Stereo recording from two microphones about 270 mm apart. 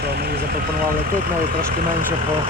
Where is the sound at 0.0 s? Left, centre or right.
Right.